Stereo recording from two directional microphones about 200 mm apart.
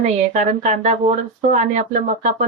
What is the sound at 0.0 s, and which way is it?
Speech, 35° right (ahead or behind).